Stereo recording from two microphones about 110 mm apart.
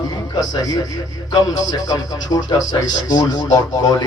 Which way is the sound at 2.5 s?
35° left (ahead or behind).